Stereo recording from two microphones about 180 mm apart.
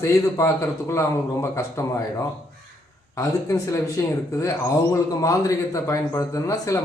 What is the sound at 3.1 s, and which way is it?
Speech, 15° left (ahead or behind).